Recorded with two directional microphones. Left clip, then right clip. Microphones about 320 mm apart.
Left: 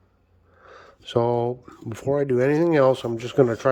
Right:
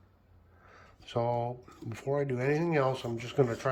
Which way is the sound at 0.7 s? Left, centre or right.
Centre.